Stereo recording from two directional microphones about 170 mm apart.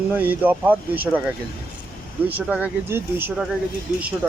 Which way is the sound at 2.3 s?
10° right (ahead or behind).